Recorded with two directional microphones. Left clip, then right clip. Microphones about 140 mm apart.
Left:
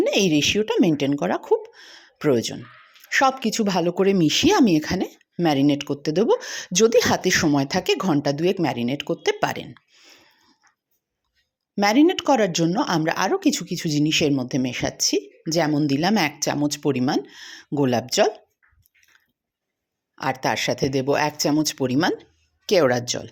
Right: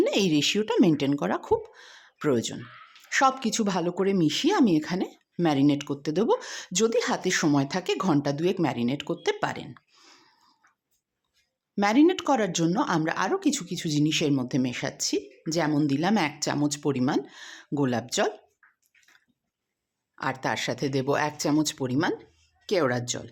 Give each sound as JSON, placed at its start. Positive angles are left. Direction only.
{"t": 0.0, "sound": "speech", "side_deg": 10}
{"t": 6.9, "sound": "speech", "side_deg": 25}
{"t": 9.6, "sound": "a sound", "side_deg": 0}
{"t": 11.8, "sound": "speech", "side_deg": 15}
{"t": 20.1, "sound": "speech", "side_deg": 15}
{"t": 21.8, "sound": "speech", "side_deg": 20}